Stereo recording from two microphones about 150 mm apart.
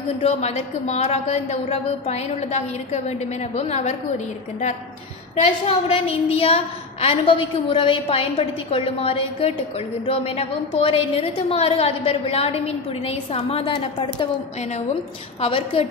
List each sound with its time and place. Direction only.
0.2 s a woman's voice: 45° left (ahead or behind)
5.3 s a woman's voice: 45° left (ahead or behind)
15.4 s a woman's voice: 35° left (ahead or behind)